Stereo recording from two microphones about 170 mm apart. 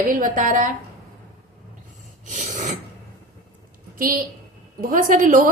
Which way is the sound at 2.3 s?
45° right (ahead or behind).